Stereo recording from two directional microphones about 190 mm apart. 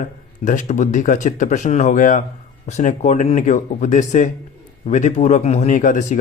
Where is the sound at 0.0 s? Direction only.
40° left (ahead or behind).